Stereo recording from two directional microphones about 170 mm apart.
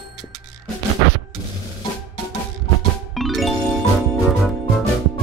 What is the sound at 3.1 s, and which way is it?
Music, centre (ahead or behind).